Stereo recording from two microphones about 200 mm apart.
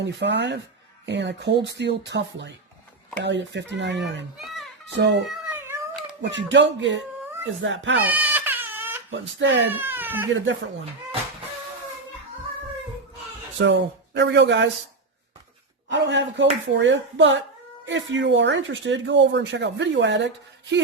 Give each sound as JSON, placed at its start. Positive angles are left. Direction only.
{"t": 0.0, "sound": "speech", "side_deg": -60}
{"t": 5.5, "sound": "cat", "side_deg": -10}
{"t": 6.3, "sound": "speech", "side_deg": -65}
{"t": 7.9, "sound": "baby cry", "side_deg": -10}
{"t": 9.0, "sound": "speech", "side_deg": -65}
{"t": 9.6, "sound": "speech", "side_deg": -10}
{"t": 10.3, "sound": "speech", "side_deg": -70}
{"t": 13.6, "sound": "speech", "side_deg": -60}
{"t": 15.9, "sound": "speech", "side_deg": -60}